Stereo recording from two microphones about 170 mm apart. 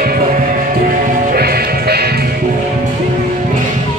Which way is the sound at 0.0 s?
55° right (ahead or behind).